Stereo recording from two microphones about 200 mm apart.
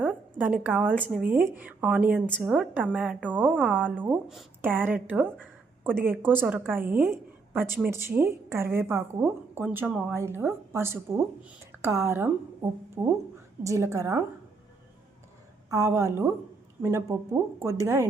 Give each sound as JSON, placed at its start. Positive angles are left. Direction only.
{"t": 0.3, "sound": "a woman's voice", "side_deg": -10}
{"t": 15.7, "sound": "a woman's voice", "side_deg": -15}